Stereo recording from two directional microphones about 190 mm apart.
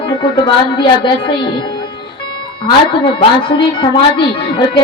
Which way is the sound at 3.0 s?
25° left (ahead or behind).